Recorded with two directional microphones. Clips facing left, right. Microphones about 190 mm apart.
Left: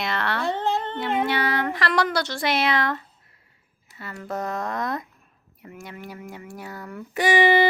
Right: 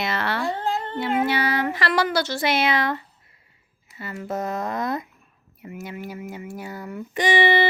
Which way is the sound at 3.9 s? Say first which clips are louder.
Right 4 dB; centre (ahead or behind).